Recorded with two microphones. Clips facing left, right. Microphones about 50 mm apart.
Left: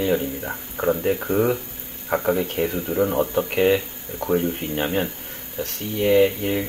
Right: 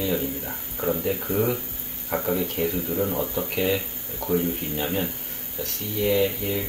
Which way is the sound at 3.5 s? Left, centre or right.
Left.